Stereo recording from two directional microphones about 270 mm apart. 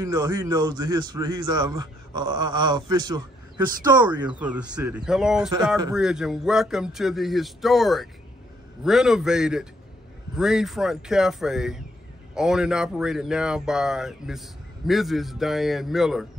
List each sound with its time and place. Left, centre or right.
0.0 s a man's voice: centre